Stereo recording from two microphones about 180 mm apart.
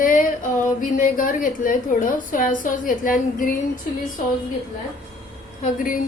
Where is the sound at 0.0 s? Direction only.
50° left (ahead or behind).